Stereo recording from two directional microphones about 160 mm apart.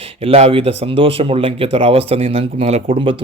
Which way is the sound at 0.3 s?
40° right (ahead or behind).